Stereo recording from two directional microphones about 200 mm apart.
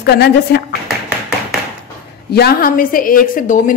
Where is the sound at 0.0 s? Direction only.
55° left (ahead or behind).